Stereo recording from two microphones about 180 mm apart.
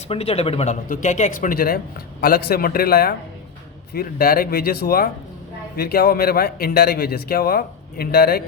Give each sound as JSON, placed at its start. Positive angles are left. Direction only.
{"t": 0.1, "sound": "a man's voice", "side_deg": 35}